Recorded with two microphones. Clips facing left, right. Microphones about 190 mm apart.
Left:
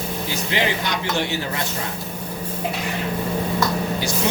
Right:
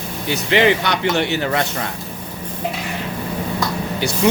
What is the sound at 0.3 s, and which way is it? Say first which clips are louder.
Speech: right 9 dB; 65° right (ahead or behind).